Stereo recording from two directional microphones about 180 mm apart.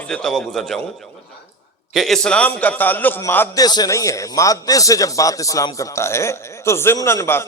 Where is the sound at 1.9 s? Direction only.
Centre (ahead or behind).